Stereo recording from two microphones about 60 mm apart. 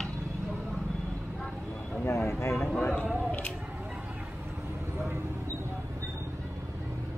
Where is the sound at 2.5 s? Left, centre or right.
Centre.